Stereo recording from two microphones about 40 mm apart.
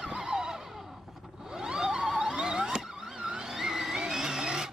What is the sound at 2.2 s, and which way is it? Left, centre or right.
Vehicle, centre.